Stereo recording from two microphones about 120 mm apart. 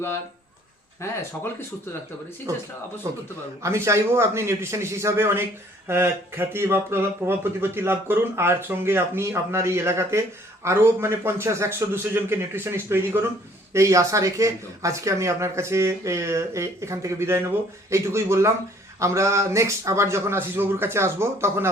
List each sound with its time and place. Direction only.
1.0 s speech: 20° left (ahead or behind)
3.1 s speech: 25° right (ahead or behind)